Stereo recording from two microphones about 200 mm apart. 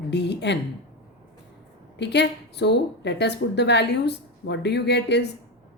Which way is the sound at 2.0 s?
60° left (ahead or behind).